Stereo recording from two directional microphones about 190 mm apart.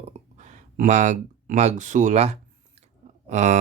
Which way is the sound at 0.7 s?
40° right (ahead or behind).